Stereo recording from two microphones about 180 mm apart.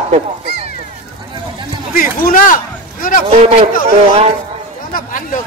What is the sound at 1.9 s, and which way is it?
Speech, 50° left (ahead or behind).